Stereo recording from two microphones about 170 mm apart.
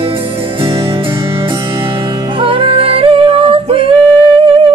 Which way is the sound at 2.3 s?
30° right (ahead or behind).